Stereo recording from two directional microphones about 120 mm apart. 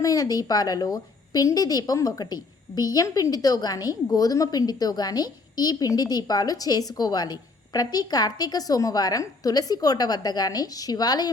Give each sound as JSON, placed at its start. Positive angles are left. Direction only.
{"t": 0.0, "sound": "a woman's voice", "side_deg": 30}